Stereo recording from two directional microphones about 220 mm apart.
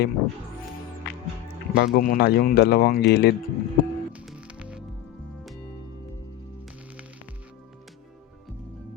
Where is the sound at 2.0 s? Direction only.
40° left (ahead or behind).